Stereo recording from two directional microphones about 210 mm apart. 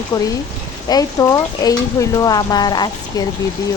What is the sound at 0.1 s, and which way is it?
Speech, 15° left (ahead or behind).